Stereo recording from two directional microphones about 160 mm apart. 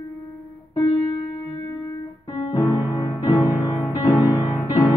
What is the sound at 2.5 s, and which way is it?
Music, 20° left (ahead or behind).